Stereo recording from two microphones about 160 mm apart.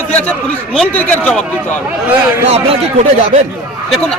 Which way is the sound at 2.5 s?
40° right (ahead or behind).